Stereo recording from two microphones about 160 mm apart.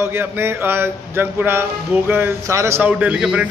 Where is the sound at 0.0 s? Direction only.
15° right (ahead or behind).